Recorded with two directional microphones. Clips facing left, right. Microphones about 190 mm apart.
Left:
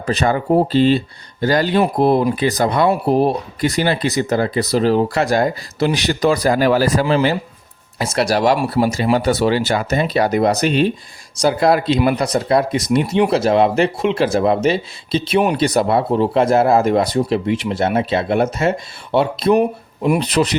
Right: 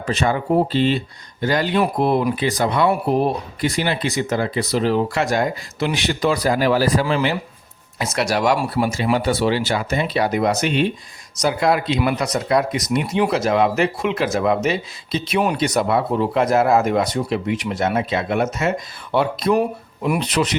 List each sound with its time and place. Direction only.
0.0 s speech: 40° left (ahead or behind)